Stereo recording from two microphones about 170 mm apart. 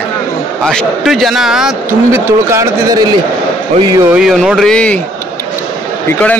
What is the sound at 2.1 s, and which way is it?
Speech, 20° right (ahead or behind).